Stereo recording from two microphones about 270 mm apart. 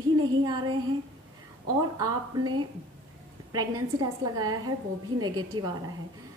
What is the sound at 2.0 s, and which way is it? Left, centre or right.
A woman's voice, centre.